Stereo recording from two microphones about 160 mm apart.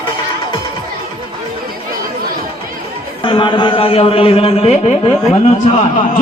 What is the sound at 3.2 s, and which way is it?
A man's voice, 30° left (ahead or behind).